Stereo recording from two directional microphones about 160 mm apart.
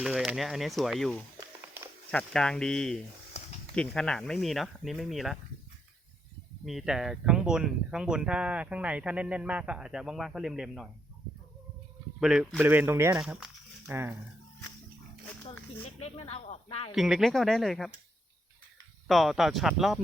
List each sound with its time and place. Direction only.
0.0 s speech: 5° right (ahead or behind)
1.4 s a sound: 15° right (ahead or behind)
2.0 s speech: 5° left (ahead or behind)
6.7 s speech: centre (ahead or behind)
12.2 s speech: 5° right (ahead or behind)
13.2 s speech: 5° right (ahead or behind)
16.0 s speech: 40° left (ahead or behind)
16.9 s speech: centre (ahead or behind)
19.0 s speech: centre (ahead or behind)